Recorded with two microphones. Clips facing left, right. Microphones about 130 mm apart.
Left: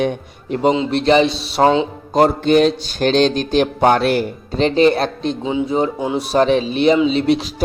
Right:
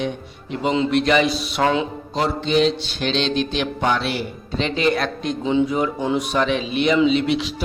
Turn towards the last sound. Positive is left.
turn(degrees=40)  # may be behind; listen again after turning